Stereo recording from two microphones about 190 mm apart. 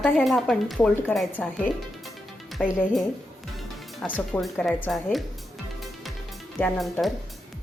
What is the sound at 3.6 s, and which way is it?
Speech, 5° left (ahead or behind).